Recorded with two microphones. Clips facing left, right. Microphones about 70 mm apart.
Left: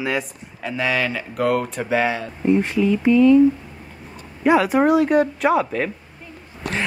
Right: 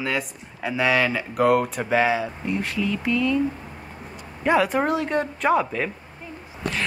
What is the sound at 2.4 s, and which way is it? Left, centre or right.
Speech, left.